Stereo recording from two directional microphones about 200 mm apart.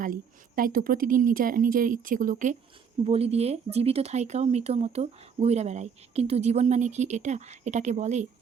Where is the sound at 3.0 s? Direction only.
30° right (ahead or behind).